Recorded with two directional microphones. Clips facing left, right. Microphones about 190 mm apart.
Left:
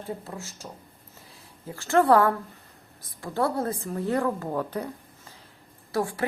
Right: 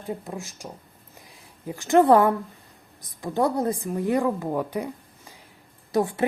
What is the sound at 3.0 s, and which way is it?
A woman's voice, 15° right (ahead or behind).